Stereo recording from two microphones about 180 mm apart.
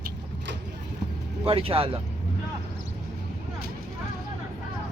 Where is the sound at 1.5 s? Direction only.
30° right (ahead or behind).